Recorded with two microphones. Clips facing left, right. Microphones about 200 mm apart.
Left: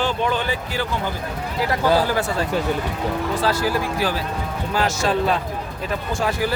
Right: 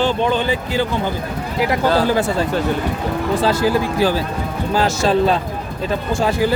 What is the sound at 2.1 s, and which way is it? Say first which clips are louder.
Speech: right 4 dB; 25° right (ahead or behind).